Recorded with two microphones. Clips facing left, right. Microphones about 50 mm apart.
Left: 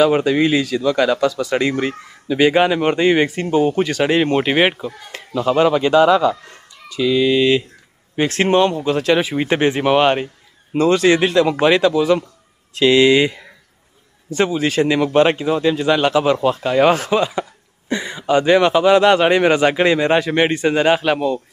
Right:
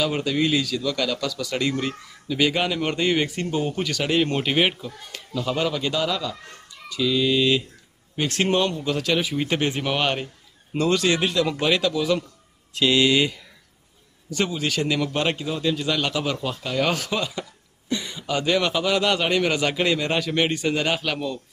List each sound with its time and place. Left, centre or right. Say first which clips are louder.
0.0 s a man's voice: left 9 dB; left